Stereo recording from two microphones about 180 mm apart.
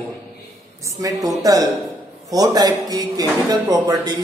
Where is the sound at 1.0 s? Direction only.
20° right (ahead or behind).